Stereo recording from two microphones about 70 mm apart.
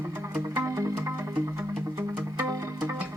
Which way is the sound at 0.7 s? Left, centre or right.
Right.